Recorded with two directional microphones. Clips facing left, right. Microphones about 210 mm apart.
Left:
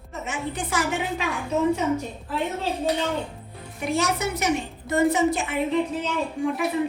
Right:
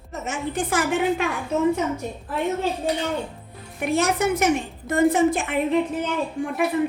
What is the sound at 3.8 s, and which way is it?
A woman's voice, 55° right (ahead or behind).